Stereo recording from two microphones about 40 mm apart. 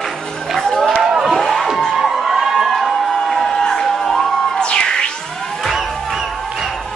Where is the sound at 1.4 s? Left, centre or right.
Centre.